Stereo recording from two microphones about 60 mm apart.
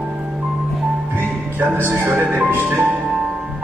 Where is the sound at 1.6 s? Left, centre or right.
Right.